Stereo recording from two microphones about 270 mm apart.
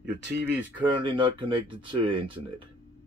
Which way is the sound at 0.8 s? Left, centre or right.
Centre.